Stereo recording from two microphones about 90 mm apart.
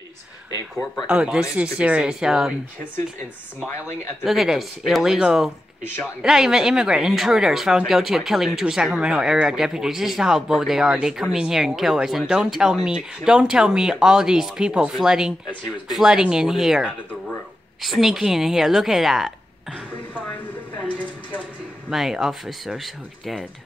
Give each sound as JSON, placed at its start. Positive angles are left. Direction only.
{"t": 1.0, "sound": "speech", "side_deg": -10}
{"t": 4.2, "sound": "speech", "side_deg": -5}
{"t": 20.2, "sound": "a sound", "side_deg": 20}
{"t": 21.9, "sound": "speech", "side_deg": -5}